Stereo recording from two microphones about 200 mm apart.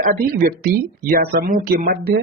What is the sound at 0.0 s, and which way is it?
Speech, 45° right (ahead or behind).